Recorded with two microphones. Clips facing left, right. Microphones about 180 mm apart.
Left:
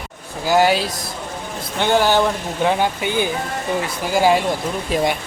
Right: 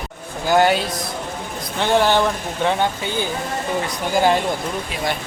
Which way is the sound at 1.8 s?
Centre (ahead or behind).